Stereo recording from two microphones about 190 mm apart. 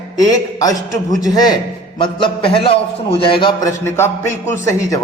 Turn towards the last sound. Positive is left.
turn(degrees=15)  # may be behind; listen again after turning